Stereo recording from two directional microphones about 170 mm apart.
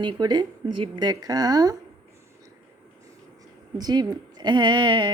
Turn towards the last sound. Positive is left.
turn(degrees=-25)  # may be behind; listen again after turning